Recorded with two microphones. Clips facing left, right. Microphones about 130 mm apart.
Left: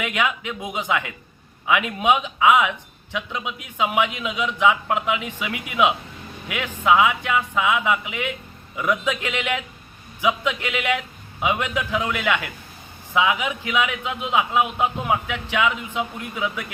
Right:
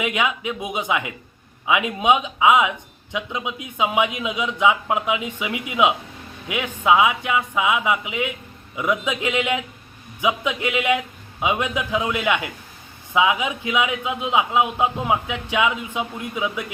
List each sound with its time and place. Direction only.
0.0 s speech: 20° right (ahead or behind)